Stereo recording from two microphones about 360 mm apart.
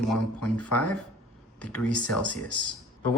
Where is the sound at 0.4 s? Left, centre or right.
Left.